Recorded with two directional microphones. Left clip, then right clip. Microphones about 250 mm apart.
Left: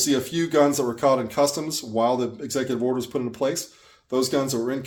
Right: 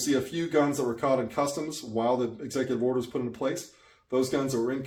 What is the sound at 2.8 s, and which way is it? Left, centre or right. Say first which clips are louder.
Speech: left 3 dB; left.